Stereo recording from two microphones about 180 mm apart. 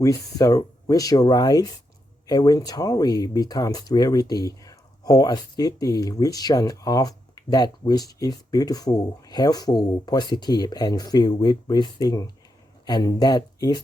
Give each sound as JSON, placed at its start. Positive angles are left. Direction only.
{"t": 0.0, "sound": "speech", "side_deg": 15}